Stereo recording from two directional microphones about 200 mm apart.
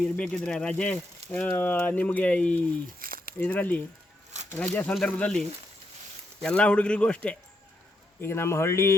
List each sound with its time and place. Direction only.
0.0 s speech: 5° left (ahead or behind)
3.0 s a sound: 45° right (ahead or behind)
3.3 s a man's voice: 10° left (ahead or behind)